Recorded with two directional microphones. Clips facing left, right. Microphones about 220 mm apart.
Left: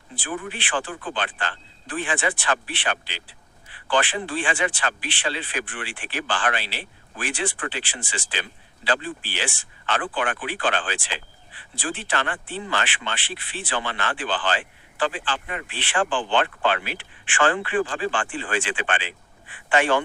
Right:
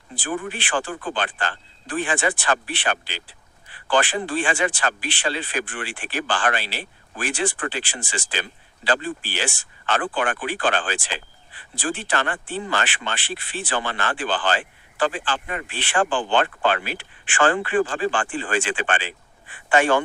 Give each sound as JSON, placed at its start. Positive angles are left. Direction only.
{"t": 0.2, "sound": "speech", "side_deg": -45}